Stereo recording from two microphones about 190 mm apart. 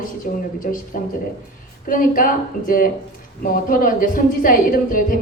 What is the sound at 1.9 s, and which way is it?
A woman's voice, 45° left (ahead or behind).